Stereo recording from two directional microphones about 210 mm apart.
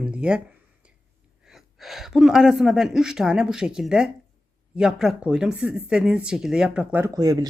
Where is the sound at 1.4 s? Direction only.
Centre (ahead or behind).